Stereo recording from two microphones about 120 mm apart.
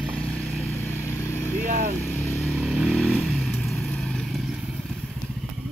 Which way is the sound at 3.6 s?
Centre (ahead or behind).